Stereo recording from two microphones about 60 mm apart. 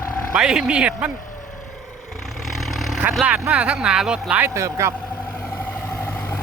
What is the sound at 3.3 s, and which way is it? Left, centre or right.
Speech, right.